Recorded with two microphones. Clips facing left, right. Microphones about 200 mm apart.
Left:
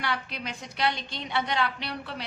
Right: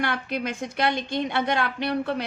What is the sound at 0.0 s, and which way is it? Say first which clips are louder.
A woman's voice: right 6 dB; 50° right (ahead or behind).